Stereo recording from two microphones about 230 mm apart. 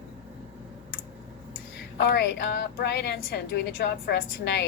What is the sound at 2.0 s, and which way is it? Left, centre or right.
A woman's voice, left.